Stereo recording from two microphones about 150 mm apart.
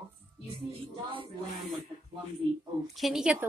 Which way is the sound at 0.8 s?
35° right (ahead or behind).